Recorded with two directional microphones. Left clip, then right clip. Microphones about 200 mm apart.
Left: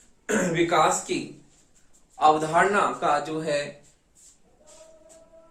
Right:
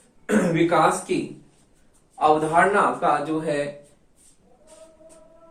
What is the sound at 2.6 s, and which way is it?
Speech, 65° left (ahead or behind).